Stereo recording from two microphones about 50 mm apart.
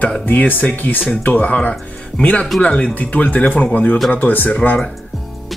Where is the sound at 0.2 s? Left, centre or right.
Left.